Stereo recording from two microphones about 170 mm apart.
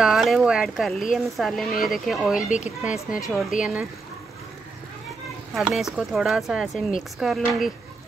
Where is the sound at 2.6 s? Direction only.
5° right (ahead or behind).